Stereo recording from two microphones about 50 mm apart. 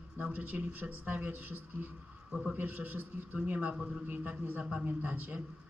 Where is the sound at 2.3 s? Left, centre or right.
Right.